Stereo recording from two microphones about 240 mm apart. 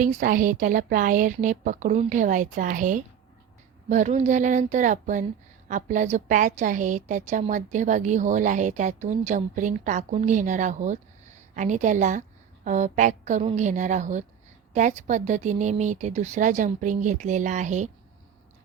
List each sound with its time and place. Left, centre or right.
0.0 s a woman's voice: right